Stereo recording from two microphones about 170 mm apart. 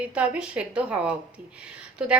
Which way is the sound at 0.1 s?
5° right (ahead or behind).